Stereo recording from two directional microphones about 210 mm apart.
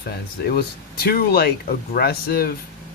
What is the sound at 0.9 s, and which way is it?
Speech, 45° left (ahead or behind).